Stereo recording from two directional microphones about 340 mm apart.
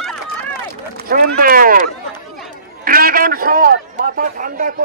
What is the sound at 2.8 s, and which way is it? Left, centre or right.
A man's voice, right.